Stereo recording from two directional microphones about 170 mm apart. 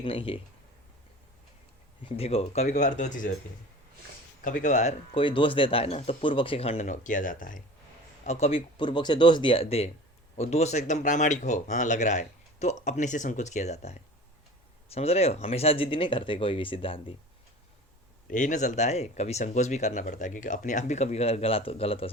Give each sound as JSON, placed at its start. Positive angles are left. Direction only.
{"t": 0.0, "sound": "speech", "side_deg": 30}
{"t": 2.0, "sound": "speech", "side_deg": 35}
{"t": 4.6, "sound": "speech", "side_deg": 45}
{"t": 8.2, "sound": "speech", "side_deg": 40}
{"t": 18.3, "sound": "speech", "side_deg": 50}